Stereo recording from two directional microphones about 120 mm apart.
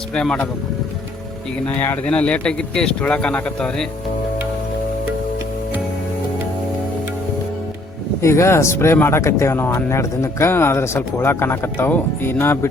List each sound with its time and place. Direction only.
0.1 s speech: 5° left (ahead or behind)
1.6 s speech: 15° left (ahead or behind)
8.2 s speech: 25° left (ahead or behind)